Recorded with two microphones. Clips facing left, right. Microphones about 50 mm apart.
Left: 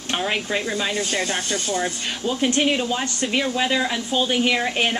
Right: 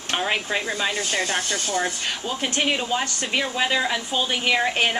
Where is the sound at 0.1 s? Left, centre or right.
Centre.